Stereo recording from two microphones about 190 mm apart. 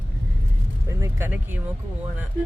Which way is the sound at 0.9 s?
15° right (ahead or behind).